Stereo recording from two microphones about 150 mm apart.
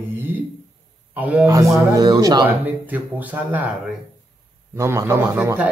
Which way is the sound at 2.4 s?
10° right (ahead or behind).